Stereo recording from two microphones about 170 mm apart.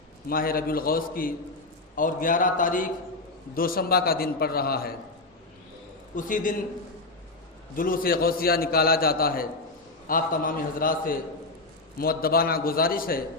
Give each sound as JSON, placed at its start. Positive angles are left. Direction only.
{"t": 0.3, "sound": "a man's voice", "side_deg": 60}
{"t": 6.1, "sound": "a man's voice", "side_deg": 50}
{"t": 7.8, "sound": "a man's voice", "side_deg": 55}